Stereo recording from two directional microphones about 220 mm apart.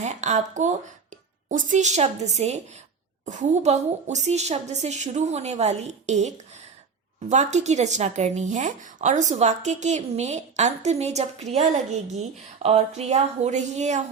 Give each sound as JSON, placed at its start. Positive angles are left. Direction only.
{"t": 0.0, "sound": "a woman's voice", "side_deg": -30}
{"t": 12.6, "sound": "a woman's voice", "side_deg": -30}